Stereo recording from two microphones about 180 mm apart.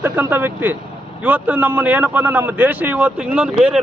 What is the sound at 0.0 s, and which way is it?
A man's voice, 10° right (ahead or behind).